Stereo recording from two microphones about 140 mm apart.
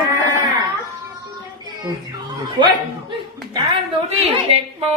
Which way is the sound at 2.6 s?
35° right (ahead or behind).